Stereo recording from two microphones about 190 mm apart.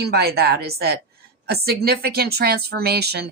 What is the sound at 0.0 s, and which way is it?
Speech, 55° right (ahead or behind).